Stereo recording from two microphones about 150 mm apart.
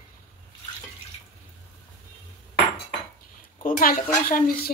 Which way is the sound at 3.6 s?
70° left (ahead or behind).